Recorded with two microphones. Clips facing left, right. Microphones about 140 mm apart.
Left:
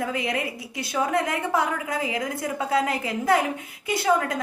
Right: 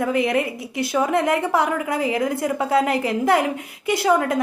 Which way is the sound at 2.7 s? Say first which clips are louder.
Right 4 dB; 25° right (ahead or behind).